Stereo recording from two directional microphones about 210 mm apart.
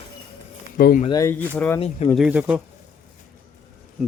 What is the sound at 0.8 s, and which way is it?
Speech, 45° left (ahead or behind).